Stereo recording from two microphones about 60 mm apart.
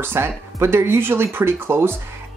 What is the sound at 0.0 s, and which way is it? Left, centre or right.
Speech, right.